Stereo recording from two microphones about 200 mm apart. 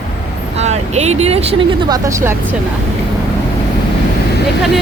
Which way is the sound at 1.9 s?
15° right (ahead or behind).